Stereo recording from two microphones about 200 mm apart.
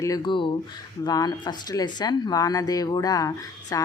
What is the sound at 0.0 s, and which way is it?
Speech, 20° left (ahead or behind).